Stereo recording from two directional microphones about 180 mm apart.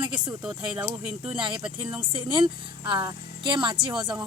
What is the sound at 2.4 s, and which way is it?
Speech, 25° right (ahead or behind).